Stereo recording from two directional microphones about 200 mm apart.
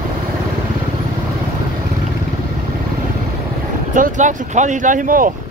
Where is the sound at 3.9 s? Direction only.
40° right (ahead or behind).